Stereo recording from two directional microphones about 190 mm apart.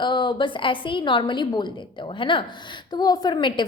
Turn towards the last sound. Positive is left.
turn(degrees=25)  # may be behind; listen again after turning